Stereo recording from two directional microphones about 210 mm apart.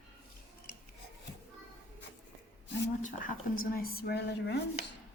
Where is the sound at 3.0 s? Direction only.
40° left (ahead or behind).